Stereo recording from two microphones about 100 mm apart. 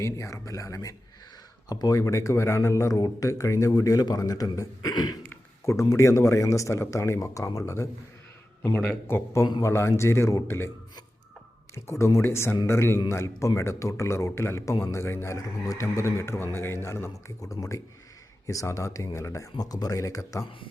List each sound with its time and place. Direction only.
0.0 s a man's voice: 30° left (ahead or behind)
5.3 s a man's voice: 30° left (ahead or behind)
8.7 s a man's voice: 10° left (ahead or behind)
9.0 s a man's voice: 25° left (ahead or behind)
11.7 s a man's voice: 25° left (ahead or behind)